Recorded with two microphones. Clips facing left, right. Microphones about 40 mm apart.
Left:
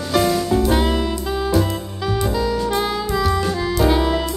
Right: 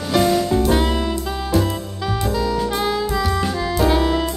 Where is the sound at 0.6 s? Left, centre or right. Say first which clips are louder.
Even; centre.